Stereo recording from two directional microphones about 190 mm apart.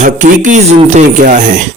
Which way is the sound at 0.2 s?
40° right (ahead or behind).